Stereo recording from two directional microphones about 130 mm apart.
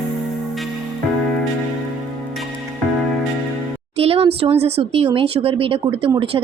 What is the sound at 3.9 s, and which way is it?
Speech, 50° right (ahead or behind).